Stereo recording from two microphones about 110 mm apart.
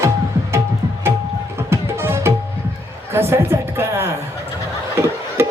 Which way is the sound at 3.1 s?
20° right (ahead or behind).